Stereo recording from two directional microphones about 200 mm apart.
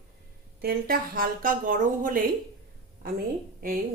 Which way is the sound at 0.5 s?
50° right (ahead or behind).